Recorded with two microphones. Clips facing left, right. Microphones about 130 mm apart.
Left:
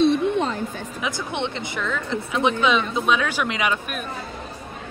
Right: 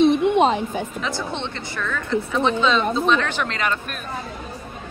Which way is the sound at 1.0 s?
15° left (ahead or behind).